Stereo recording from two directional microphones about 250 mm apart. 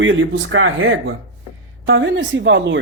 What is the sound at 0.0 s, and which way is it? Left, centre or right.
Speech, right.